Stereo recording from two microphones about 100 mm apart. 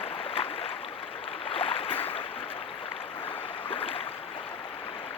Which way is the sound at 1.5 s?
70° left (ahead or behind).